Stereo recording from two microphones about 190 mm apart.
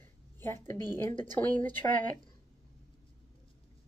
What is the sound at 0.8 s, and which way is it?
A woman's voice, 10° left (ahead or behind).